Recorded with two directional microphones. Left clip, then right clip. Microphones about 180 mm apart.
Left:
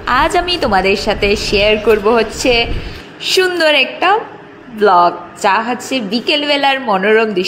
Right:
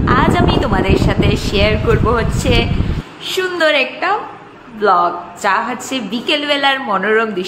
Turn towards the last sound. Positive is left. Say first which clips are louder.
# left 3 dB
turn(degrees=25)  # may be behind; listen again after turning